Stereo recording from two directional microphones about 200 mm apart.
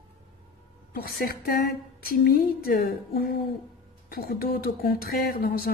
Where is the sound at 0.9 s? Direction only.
50° left (ahead or behind).